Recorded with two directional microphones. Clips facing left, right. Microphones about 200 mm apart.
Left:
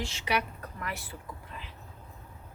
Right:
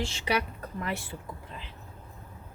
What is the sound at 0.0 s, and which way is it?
Speech, 30° right (ahead or behind).